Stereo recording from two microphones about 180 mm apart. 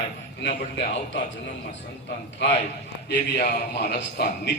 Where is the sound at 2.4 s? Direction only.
75° left (ahead or behind).